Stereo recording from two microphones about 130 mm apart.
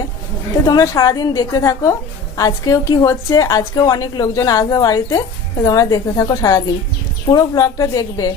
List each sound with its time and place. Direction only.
0.6 s a woman's voice: 25° left (ahead or behind)